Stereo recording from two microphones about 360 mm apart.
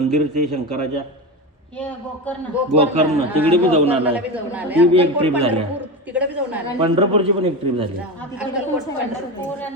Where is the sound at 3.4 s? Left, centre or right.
Centre.